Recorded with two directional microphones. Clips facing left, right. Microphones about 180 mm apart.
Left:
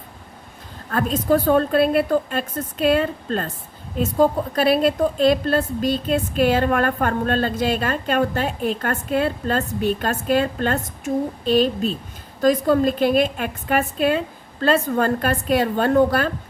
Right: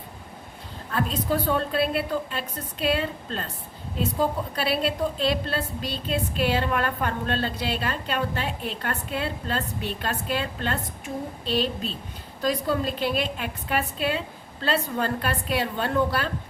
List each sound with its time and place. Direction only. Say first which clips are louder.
0.9 s a woman's voice: left 7 dB; 50° left (ahead or behind)